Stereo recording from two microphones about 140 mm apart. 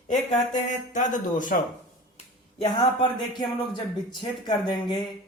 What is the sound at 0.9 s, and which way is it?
Speech, 60° left (ahead or behind).